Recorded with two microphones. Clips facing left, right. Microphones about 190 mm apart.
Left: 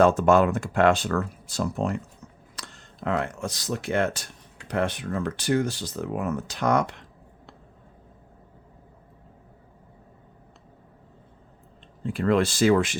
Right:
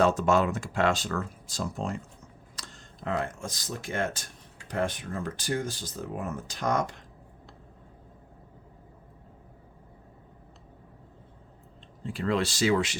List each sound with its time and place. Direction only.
0.0 s speech: 55° left (ahead or behind)
12.0 s speech: 55° left (ahead or behind)